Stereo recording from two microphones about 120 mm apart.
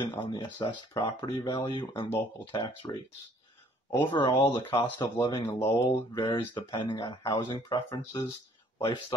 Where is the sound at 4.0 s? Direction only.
40° left (ahead or behind).